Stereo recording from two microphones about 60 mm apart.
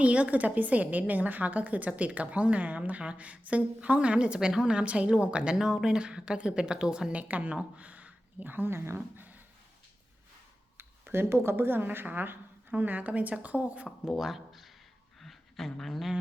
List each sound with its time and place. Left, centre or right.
0.0 s a woman's voice: right
7.1 s a woman's voice: right
9.1 s a sound: right
10.8 s a woman's voice: right
14.0 s speech: centre
15.2 s a sound: centre